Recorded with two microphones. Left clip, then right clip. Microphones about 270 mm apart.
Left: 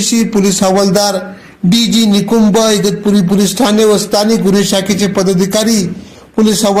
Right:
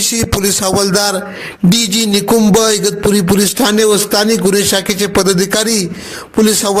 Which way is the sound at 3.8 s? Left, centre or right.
Right.